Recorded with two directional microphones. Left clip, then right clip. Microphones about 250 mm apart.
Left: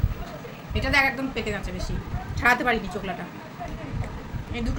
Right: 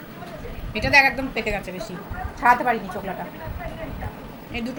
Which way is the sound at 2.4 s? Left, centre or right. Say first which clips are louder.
Right 3 dB; left.